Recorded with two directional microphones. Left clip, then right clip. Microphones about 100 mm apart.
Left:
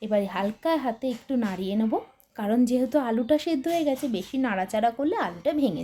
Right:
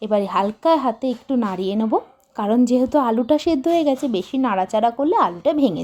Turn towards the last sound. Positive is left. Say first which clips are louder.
# right 7 dB
turn(degrees=-45)  # may be behind; listen again after turning